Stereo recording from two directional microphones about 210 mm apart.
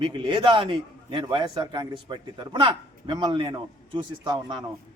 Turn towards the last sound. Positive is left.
turn(degrees=-20)  # may be behind; listen again after turning